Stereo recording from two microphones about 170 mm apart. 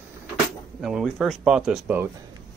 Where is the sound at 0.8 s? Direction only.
5° right (ahead or behind).